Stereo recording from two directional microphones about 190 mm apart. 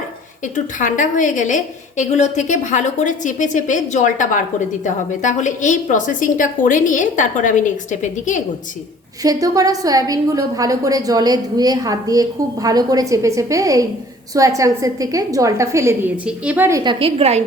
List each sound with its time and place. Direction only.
0.4 s a woman's voice: 40° left (ahead or behind)
9.2 s a woman's voice: 20° right (ahead or behind)